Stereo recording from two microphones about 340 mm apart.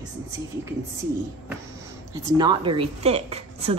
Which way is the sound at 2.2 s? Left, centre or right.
Centre.